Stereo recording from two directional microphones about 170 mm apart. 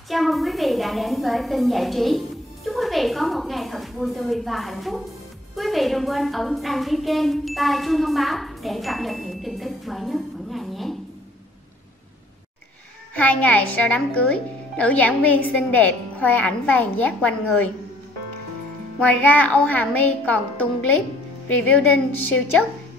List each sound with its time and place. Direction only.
0.1 s a woman's voice: centre (ahead or behind)
13.1 s speech: 10° left (ahead or behind)
18.9 s speech: 10° left (ahead or behind)